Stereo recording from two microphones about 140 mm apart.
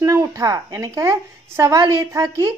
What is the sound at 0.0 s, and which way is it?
Speech, 20° right (ahead or behind).